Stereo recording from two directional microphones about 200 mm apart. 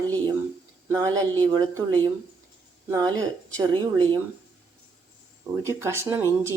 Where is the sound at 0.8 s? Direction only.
15° right (ahead or behind).